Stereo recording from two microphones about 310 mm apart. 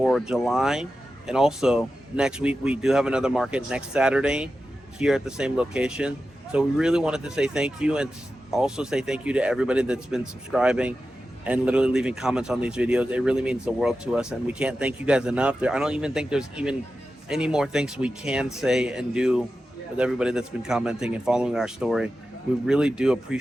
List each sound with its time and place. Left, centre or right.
0.0 s a man's voice: centre